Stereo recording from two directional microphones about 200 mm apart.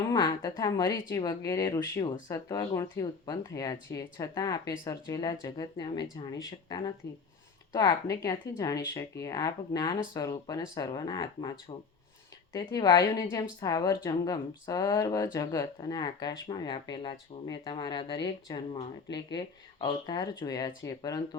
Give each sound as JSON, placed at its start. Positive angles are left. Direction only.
{"t": 0.1, "sound": "speech", "side_deg": 20}
{"t": 12.5, "sound": "speech", "side_deg": 20}